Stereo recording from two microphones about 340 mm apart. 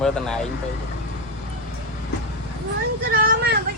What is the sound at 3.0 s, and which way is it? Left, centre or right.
Vehicle, right.